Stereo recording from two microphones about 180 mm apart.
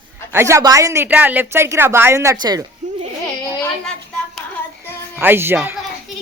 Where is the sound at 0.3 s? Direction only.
15° right (ahead or behind).